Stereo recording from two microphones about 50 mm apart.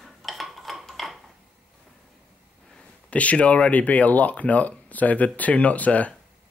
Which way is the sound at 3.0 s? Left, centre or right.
Left.